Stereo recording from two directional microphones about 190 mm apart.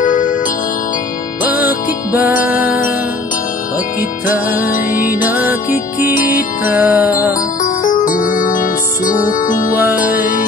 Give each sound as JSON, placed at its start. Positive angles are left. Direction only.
{"t": 0.0, "sound": "music", "side_deg": 45}
{"t": 1.6, "sound": "music", "side_deg": -10}
{"t": 4.7, "sound": "music", "side_deg": 50}
{"t": 5.2, "sound": "music", "side_deg": -10}
{"t": 5.7, "sound": "music", "side_deg": 50}
{"t": 6.6, "sound": "music", "side_deg": -10}
{"t": 7.6, "sound": "music", "side_deg": 45}